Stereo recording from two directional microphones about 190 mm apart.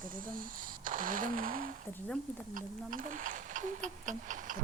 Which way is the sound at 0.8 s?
45° right (ahead or behind).